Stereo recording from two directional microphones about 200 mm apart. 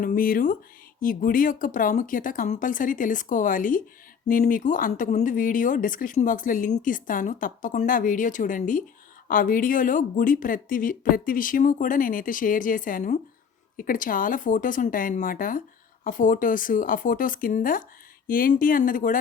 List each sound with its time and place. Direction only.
0.0 s speech: 45° left (ahead or behind)